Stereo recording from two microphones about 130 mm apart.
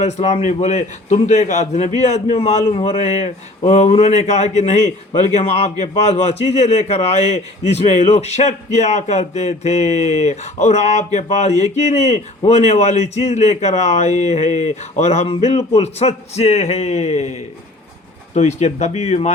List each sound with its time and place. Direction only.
0.0 s a man's voice: 60° left (ahead or behind)
3.0 s a man's voice: 60° left (ahead or behind)